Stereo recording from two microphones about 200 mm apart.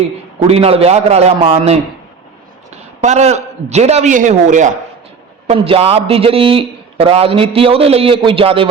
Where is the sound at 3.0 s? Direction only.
35° right (ahead or behind).